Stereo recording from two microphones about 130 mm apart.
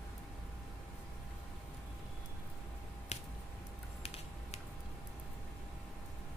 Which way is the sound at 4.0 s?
55° left (ahead or behind).